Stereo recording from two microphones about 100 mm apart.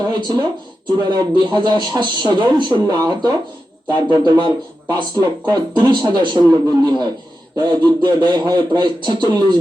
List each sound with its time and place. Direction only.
0.0 s speech: 45° right (ahead or behind)